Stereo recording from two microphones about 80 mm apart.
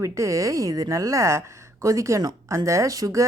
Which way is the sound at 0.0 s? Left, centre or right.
Right.